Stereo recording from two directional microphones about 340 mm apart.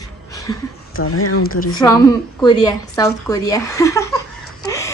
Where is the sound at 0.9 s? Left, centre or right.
Left.